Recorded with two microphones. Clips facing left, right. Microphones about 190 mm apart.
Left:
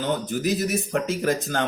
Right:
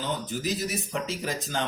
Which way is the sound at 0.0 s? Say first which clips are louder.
Left 6 dB; 55° left (ahead or behind).